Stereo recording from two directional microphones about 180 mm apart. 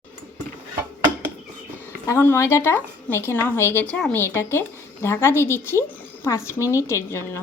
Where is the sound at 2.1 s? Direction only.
15° left (ahead or behind).